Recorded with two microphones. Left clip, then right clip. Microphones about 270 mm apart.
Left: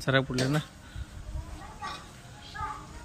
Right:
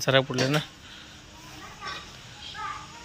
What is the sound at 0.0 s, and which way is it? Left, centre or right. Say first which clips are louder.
Speech: right 4 dB; centre.